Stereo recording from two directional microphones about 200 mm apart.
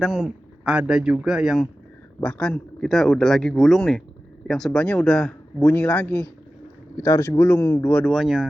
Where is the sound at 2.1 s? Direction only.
10° left (ahead or behind).